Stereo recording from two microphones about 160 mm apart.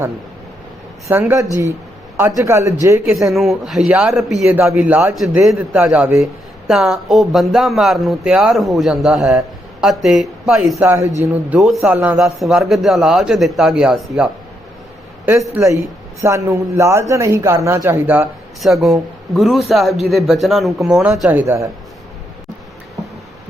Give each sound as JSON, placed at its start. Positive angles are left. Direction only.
{"t": 1.0, "sound": "a man's voice", "side_deg": -15}
{"t": 3.2, "sound": "speech", "side_deg": 0}
{"t": 5.1, "sound": "a man's voice", "side_deg": 0}
{"t": 6.7, "sound": "speech", "side_deg": 0}
{"t": 10.8, "sound": "a man's voice", "side_deg": -15}
{"t": 11.6, "sound": "speech", "side_deg": 0}
{"t": 16.2, "sound": "a man's voice", "side_deg": -20}
{"t": 18.6, "sound": "a man's voice", "side_deg": 0}